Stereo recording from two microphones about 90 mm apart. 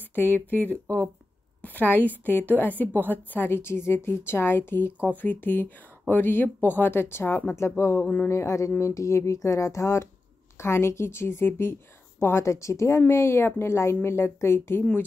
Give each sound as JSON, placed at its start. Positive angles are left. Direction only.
{"t": 0.1, "sound": "speech", "side_deg": 20}